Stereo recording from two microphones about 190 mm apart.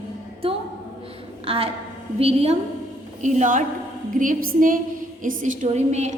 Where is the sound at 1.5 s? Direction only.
30° right (ahead or behind).